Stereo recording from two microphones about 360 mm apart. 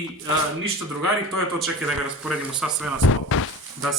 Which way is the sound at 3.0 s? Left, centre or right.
Left.